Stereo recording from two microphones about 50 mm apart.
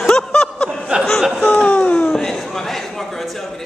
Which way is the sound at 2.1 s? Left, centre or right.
Centre.